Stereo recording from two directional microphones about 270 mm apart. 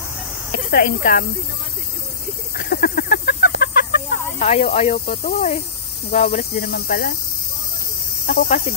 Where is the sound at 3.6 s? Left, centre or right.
Left.